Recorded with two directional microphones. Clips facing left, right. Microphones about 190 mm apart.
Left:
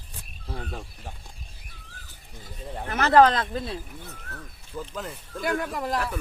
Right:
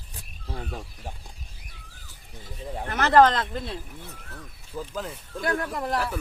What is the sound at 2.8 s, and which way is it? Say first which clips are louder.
Speech: even; 15° left (ahead or behind).